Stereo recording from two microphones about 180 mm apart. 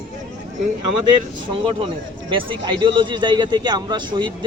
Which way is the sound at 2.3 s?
30° right (ahead or behind).